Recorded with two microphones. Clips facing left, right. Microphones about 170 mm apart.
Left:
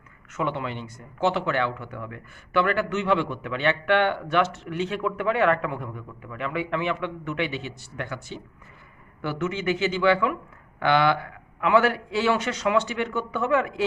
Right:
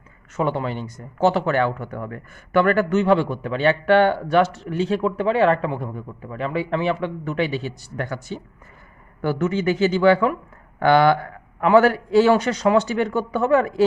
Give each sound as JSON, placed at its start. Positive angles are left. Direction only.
{"t": 0.3, "sound": "speech", "side_deg": -40}